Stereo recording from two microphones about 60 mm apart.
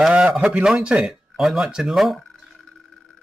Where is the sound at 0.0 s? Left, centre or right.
Centre.